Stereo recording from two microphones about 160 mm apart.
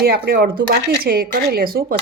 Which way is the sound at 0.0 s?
80° right.